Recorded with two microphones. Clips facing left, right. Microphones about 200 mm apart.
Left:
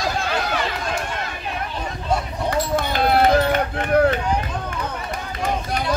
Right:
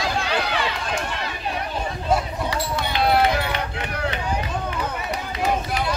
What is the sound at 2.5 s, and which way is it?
Run, 45° left (ahead or behind).